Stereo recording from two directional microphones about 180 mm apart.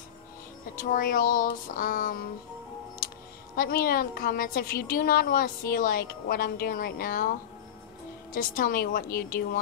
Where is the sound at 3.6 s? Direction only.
55° left (ahead or behind).